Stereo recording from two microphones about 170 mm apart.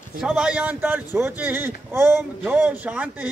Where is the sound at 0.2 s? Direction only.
5° right (ahead or behind).